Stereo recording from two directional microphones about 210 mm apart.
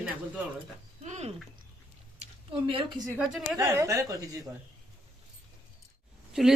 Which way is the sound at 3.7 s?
15° right (ahead or behind).